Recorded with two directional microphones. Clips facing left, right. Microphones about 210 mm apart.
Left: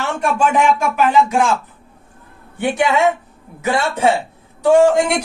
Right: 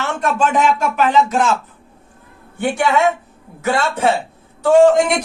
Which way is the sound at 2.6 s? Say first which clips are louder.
Even; 15° left (ahead or behind).